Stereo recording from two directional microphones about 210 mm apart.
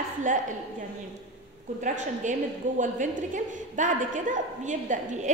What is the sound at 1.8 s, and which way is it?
A woman's voice, 35° right (ahead or behind).